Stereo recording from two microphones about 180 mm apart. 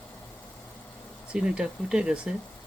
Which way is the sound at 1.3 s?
5° right (ahead or behind).